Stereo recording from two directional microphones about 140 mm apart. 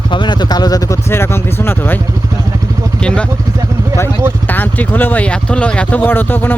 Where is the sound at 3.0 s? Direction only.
5° left (ahead or behind).